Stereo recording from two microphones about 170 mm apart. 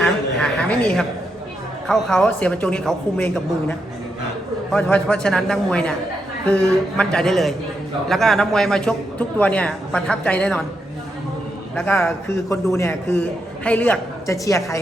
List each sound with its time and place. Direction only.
0.0 s a sound: 5° left (ahead or behind)
1.9 s a man's voice: 5° left (ahead or behind)
11.8 s speech: 5° left (ahead or behind)